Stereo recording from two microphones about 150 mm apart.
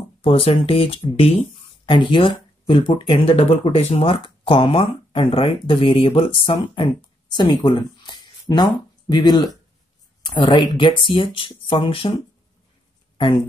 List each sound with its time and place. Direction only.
0.2 s speech: 40° left (ahead or behind)